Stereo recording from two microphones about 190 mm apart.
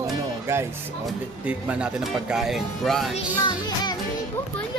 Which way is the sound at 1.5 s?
5° right (ahead or behind).